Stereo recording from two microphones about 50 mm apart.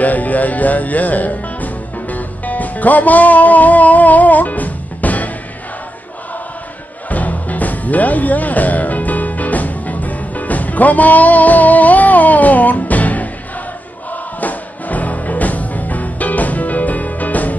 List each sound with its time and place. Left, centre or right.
0.0 s music: left
7.1 s music: left